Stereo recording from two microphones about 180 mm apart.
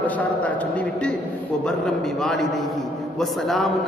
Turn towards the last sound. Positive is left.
turn(degrees=0)  # may be behind; listen again after turning